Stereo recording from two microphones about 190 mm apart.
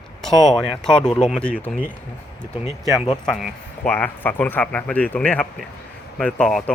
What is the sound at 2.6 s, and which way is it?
Speech, 15° right (ahead or behind).